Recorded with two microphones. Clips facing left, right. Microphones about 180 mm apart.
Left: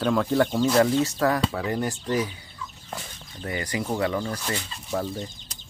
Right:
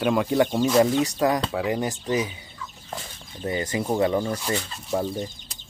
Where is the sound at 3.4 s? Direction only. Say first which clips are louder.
Right 3 dB; 25° right (ahead or behind).